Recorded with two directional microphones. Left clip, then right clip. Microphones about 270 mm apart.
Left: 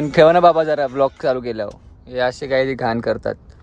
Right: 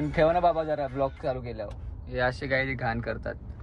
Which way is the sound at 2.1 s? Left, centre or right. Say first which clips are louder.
Left 8 dB; centre.